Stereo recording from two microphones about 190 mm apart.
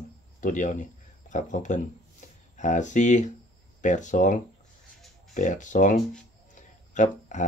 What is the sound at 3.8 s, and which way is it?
Speech, 40° left (ahead or behind).